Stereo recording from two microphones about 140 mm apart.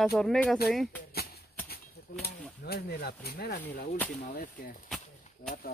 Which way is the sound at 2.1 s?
90° left.